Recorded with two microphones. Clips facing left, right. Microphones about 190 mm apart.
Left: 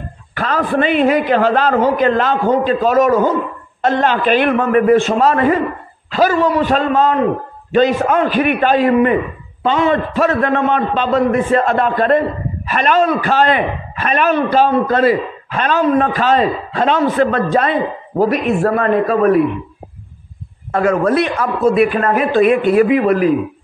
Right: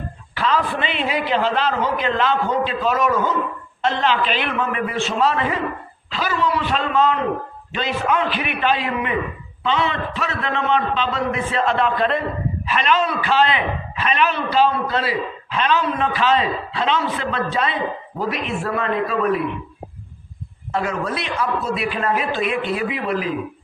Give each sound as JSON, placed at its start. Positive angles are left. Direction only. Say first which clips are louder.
{"t": 0.3, "sound": "a man's voice", "louder": "left 4 dB", "side_deg": 50}
{"t": 20.7, "sound": "a man's voice", "louder": "left 10 dB", "side_deg": 50}